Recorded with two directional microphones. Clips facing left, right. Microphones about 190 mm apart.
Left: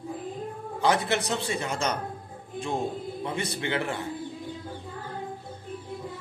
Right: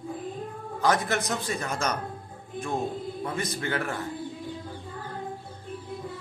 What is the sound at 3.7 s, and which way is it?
Speech, 30° left (ahead or behind).